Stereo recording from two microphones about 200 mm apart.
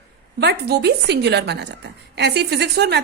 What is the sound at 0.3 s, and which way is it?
A woman's voice, 55° right (ahead or behind).